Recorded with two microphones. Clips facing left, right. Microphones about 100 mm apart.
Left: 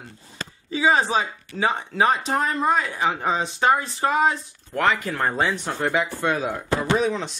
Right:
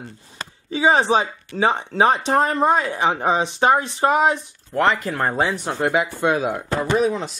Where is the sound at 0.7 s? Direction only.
25° right (ahead or behind).